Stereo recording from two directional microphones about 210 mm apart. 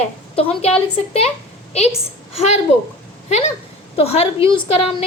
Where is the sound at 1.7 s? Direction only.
30° left (ahead or behind).